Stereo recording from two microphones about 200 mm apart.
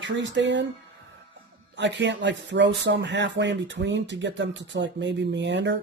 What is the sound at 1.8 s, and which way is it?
Speech, 65° right (ahead or behind).